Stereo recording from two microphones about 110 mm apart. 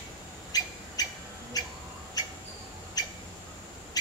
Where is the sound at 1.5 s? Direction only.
35° left (ahead or behind).